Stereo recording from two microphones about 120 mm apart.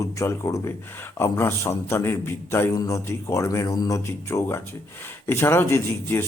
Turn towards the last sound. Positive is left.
turn(degrees=20)  # may be behind; listen again after turning